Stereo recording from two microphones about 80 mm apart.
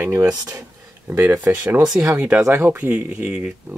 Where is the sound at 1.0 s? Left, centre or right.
Right.